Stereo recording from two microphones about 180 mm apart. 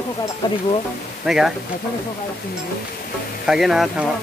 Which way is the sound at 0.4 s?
25° left (ahead or behind).